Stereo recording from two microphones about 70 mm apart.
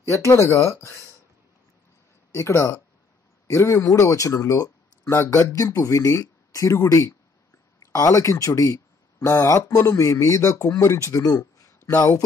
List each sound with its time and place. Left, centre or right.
0.1 s speech: left
2.3 s speech: left
5.5 s speech: left
11.3 s a sound: left
11.9 s speech: left